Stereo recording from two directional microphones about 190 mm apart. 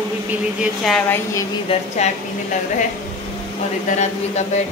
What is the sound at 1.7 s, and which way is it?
Speech, 35° left (ahead or behind).